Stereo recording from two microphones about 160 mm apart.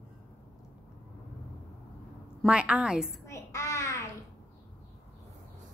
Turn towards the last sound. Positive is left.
turn(degrees=20)  # may be behind; listen again after turning